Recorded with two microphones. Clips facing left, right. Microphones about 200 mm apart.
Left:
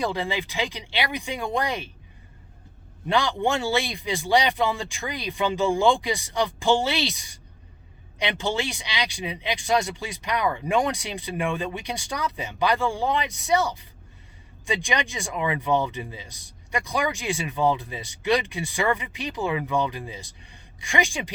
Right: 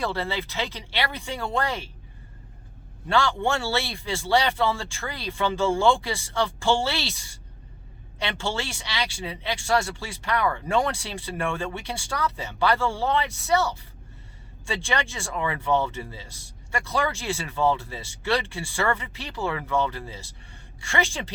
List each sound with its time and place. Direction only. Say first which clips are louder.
0.0 s speech: left 1 dB; 15° left (ahead or behind)
3.1 s speech: even; 15° left (ahead or behind)